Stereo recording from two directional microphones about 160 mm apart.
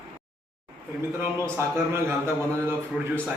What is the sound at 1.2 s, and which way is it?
Speech, 15° right (ahead or behind).